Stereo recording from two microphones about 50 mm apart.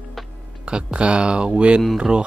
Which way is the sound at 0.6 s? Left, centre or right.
Centre.